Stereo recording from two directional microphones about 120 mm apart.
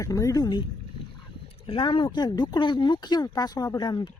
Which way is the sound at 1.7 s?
45° left (ahead or behind).